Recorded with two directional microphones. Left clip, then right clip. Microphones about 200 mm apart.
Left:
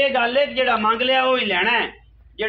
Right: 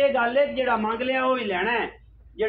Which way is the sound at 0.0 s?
40° left (ahead or behind).